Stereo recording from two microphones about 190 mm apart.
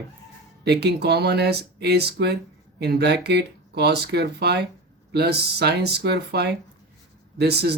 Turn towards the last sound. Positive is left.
turn(degrees=-60)  # may be behind; listen again after turning